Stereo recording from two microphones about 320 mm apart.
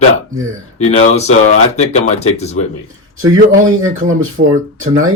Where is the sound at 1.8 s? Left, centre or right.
Left.